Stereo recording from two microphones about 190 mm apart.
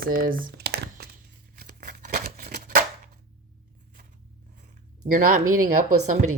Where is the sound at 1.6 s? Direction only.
55° right (ahead or behind).